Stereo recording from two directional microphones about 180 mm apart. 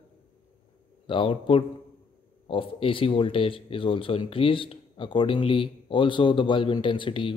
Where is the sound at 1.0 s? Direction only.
30° left (ahead or behind).